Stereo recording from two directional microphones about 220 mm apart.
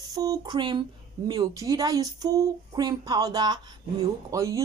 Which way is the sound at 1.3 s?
15° right (ahead or behind).